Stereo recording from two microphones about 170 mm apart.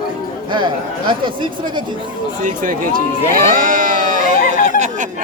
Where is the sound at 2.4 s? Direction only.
50° right (ahead or behind).